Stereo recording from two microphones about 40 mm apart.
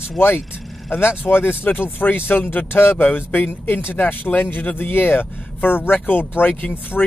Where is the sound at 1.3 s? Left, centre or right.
Left.